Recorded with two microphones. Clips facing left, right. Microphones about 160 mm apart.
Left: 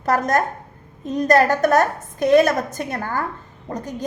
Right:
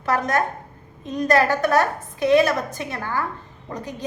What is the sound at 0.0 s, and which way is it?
A woman's voice, 40° left (ahead or behind).